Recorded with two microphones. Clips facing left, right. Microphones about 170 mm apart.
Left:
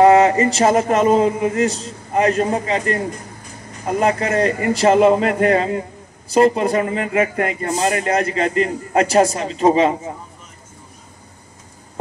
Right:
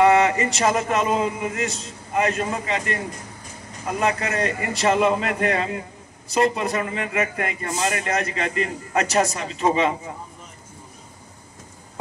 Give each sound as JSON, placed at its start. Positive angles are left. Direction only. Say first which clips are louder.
{"t": 0.0, "sound": "a man's voice", "louder": "left 5 dB", "side_deg": 35}